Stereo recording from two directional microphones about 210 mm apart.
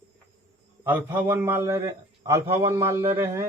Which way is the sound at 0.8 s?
10° right (ahead or behind).